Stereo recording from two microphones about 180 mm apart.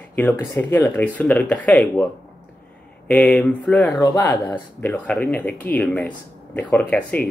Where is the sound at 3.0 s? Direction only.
5° left (ahead or behind).